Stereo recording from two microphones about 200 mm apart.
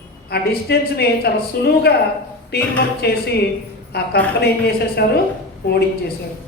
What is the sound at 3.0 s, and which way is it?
A woman's voice, 55° left (ahead or behind).